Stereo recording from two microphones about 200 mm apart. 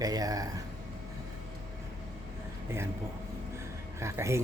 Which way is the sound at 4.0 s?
15° right (ahead or behind).